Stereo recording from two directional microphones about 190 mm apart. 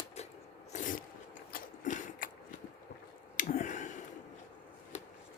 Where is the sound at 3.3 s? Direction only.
40° left (ahead or behind).